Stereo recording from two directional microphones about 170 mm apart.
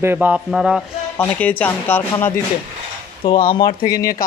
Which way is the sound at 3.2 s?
30° left (ahead or behind).